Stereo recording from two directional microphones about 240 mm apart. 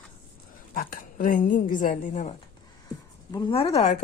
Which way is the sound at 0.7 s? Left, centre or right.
Left.